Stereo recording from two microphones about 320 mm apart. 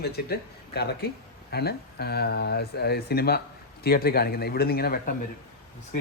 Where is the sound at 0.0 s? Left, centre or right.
Left.